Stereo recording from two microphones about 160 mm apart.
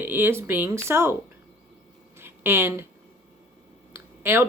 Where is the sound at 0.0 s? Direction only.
15° right (ahead or behind).